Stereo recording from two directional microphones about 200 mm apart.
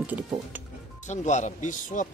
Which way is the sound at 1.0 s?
35° left (ahead or behind).